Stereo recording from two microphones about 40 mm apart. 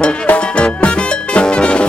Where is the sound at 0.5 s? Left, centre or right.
Left.